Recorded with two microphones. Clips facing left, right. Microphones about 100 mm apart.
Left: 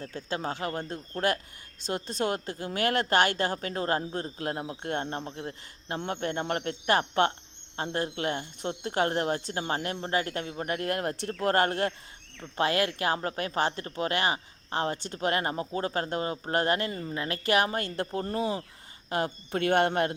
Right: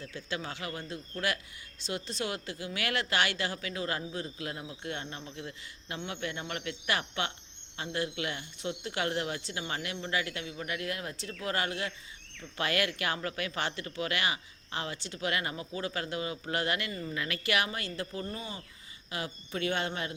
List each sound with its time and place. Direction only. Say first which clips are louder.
0.0 s speech: left 5 dB; 45° left (ahead or behind)
12.4 s speech: left 5 dB; 35° left (ahead or behind); by 20.1 s 55° left (ahead or behind)